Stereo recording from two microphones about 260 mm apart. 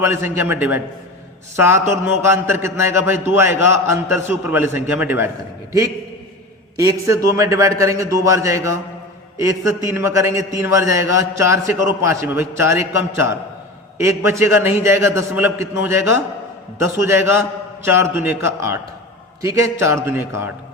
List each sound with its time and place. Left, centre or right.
0.0 s a man's voice: centre
6.7 s a man's voice: centre